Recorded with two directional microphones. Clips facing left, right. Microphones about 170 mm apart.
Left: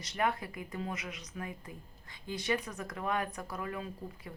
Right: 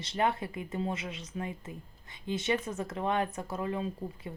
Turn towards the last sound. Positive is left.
turn(degrees=-25)  # may be behind; listen again after turning